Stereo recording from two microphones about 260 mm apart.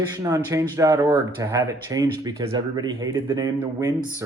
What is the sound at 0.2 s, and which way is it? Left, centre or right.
Speech, centre.